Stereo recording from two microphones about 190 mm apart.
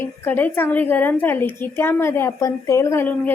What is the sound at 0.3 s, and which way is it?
A woman's voice, 10° left (ahead or behind).